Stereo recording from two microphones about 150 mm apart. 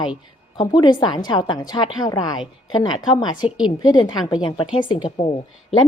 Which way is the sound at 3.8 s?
30° left (ahead or behind).